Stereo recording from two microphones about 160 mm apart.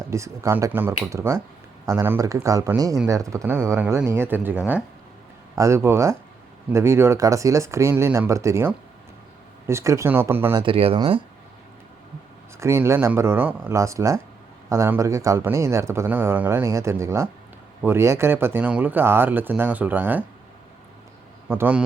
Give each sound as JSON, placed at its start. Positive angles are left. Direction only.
{"t": 0.1, "sound": "speech", "side_deg": -20}
{"t": 10.5, "sound": "speech", "side_deg": -30}
{"t": 12.5, "sound": "speech", "side_deg": -15}
{"t": 21.5, "sound": "speech", "side_deg": -10}